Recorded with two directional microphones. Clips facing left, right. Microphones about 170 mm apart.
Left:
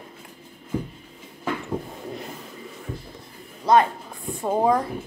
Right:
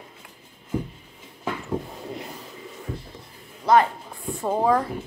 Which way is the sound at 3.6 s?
20° left (ahead or behind).